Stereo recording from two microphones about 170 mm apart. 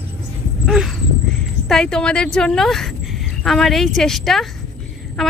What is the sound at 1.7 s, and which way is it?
Speech, 5° left (ahead or behind).